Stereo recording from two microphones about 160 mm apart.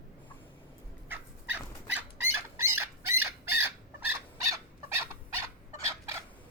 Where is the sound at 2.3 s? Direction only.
15° right (ahead or behind).